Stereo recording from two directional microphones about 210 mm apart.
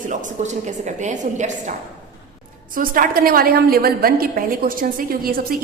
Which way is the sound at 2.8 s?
45° right (ahead or behind).